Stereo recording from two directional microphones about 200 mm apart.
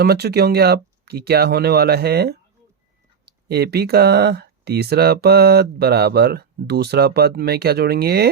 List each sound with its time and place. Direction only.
0.0 s speech: 50° right (ahead or behind)